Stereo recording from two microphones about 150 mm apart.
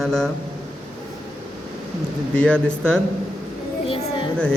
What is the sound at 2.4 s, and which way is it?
Speech, 5° left (ahead or behind).